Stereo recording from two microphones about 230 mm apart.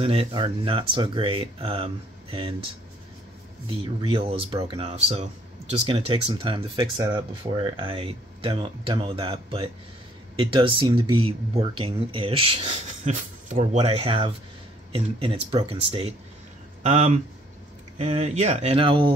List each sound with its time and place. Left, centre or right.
0.0 s speech: right
3.6 s speech: right